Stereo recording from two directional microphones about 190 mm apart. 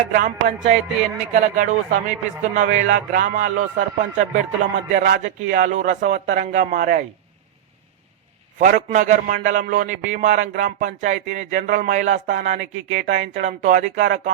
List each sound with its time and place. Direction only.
0.1 s a man's voice: 45° right (ahead or behind)
8.5 s a man's voice: 45° right (ahead or behind)